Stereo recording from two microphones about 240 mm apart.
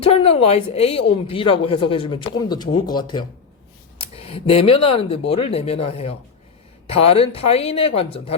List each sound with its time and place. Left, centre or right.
0.0 s speech: left